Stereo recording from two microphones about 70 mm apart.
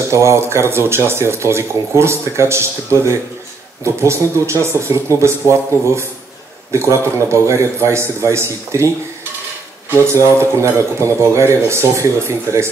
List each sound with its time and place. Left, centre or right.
0.1 s a man's voice: right